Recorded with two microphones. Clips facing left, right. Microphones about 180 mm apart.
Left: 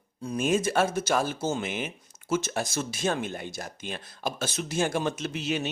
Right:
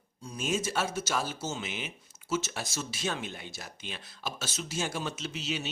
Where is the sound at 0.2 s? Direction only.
60° left (ahead or behind).